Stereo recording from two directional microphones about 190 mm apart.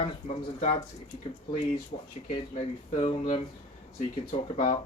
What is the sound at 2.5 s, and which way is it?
Speech, 35° left (ahead or behind).